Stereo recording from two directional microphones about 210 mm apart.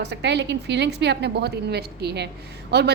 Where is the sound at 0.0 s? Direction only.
55° right (ahead or behind).